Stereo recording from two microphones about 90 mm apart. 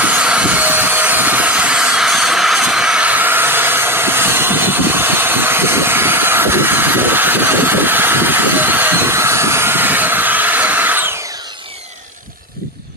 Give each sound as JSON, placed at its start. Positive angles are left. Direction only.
{"t": 0.0, "sound": "vehicle", "side_deg": -15}